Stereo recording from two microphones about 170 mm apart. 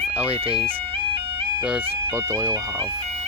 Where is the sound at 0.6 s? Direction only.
30° right (ahead or behind).